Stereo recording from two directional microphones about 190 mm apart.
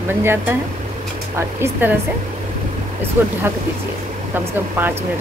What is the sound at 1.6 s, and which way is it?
Speech, 10° right (ahead or behind).